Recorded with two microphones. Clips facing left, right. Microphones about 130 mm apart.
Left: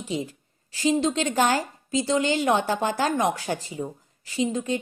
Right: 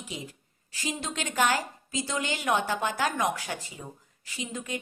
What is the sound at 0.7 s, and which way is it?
A woman's voice, 30° left (ahead or behind).